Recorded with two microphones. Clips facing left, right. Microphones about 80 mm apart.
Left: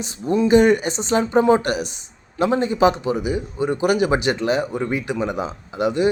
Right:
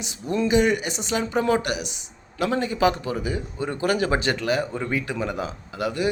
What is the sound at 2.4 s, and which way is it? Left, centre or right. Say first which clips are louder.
Speech: left 5 dB; left.